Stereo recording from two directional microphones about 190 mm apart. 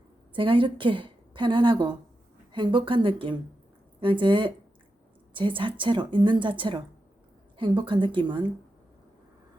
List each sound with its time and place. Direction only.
0.3 s a woman's voice: 25° right (ahead or behind)